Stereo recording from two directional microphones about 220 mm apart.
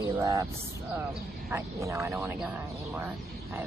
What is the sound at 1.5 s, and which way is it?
Speech, 10° right (ahead or behind).